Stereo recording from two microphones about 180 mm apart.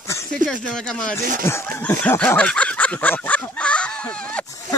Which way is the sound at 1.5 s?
10° left (ahead or behind).